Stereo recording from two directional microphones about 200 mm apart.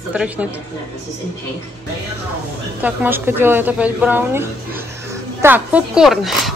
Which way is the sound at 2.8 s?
10° right (ahead or behind).